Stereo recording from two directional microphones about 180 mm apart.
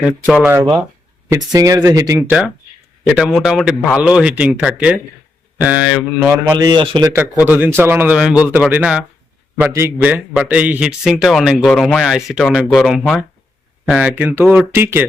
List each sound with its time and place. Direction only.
0.4 s a man's voice: 15° right (ahead or behind)
3.0 s a man's voice: 5° right (ahead or behind)
6.4 s a man's voice: 25° right (ahead or behind)